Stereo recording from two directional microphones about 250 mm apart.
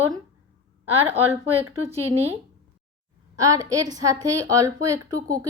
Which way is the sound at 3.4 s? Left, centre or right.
Centre.